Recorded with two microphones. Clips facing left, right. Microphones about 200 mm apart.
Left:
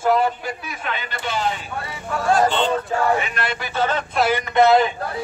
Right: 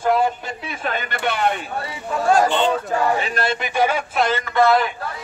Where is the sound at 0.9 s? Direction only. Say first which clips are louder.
Right 4 dB; 55° right (ahead or behind).